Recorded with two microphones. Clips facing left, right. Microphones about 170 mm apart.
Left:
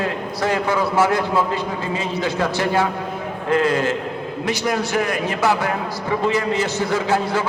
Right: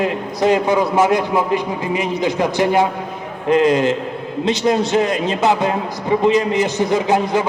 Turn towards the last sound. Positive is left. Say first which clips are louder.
# right 4 dB
turn(degrees=-15)  # may be behind; listen again after turning